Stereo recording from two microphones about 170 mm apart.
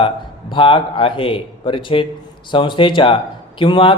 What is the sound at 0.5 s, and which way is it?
A man's voice, 30° left (ahead or behind).